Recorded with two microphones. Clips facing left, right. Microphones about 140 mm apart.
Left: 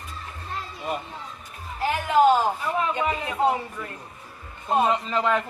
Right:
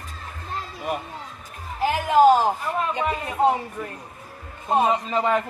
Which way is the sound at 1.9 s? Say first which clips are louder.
Right 3 dB; 35° right (ahead or behind).